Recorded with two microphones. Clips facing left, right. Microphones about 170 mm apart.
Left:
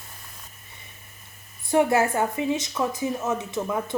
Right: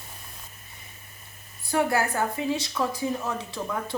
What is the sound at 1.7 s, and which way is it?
Speech, 20° left (ahead or behind).